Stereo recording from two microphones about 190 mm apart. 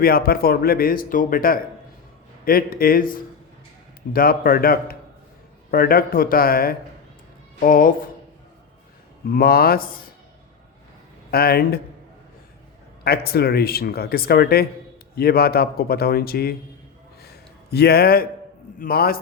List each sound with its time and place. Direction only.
0.0 s speech: 50° left (ahead or behind)
4.1 s speech: 50° left (ahead or behind)
9.3 s speech: 50° left (ahead or behind)
11.3 s speech: 55° left (ahead or behind)
13.1 s speech: 55° left (ahead or behind)
17.2 s a sound: 55° left (ahead or behind)
18.8 s speech: 50° left (ahead or behind)